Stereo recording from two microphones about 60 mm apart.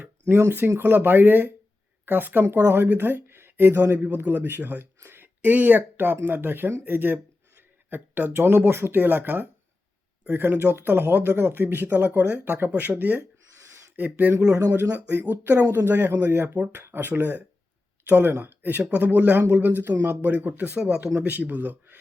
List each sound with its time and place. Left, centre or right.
0.0 s speech: right
20.7 s speech: centre